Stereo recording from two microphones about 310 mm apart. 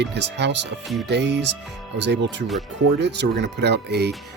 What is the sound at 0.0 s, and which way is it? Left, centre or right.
Speech, right.